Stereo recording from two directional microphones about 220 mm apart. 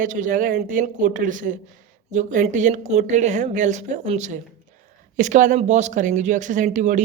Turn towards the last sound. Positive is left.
turn(degrees=-35)  # may be behind; listen again after turning